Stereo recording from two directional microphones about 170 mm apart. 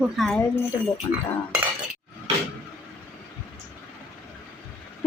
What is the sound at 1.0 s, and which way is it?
Speech, 20° left (ahead or behind).